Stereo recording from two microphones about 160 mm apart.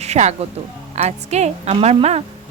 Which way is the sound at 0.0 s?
45° right (ahead or behind).